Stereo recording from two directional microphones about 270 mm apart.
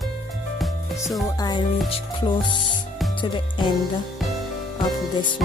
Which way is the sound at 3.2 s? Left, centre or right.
Centre.